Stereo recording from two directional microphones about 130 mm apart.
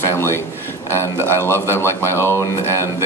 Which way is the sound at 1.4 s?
20° left (ahead or behind).